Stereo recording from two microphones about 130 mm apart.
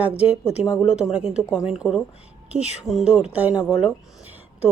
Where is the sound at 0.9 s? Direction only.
5° right (ahead or behind).